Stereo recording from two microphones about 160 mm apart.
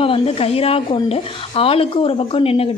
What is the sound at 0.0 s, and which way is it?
Speech, 35° left (ahead or behind).